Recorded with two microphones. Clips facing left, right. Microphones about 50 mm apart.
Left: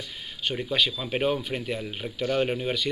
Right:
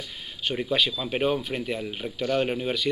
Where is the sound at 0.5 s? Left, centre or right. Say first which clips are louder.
Right 1 dB; centre.